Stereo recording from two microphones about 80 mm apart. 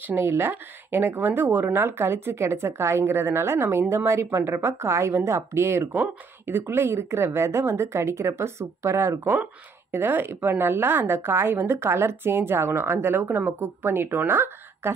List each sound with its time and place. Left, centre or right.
0.1 s a woman's voice: right